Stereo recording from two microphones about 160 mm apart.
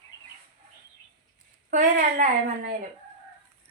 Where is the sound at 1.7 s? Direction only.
55° right (ahead or behind).